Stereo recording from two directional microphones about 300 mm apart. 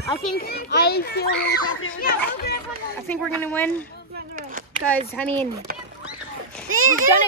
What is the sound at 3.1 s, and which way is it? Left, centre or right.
Speech, centre.